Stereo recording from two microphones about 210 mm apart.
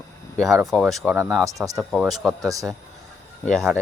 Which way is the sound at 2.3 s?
15° right (ahead or behind).